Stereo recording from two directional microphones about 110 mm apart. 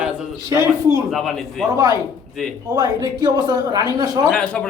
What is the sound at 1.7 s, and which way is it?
Speech, 30° right (ahead or behind).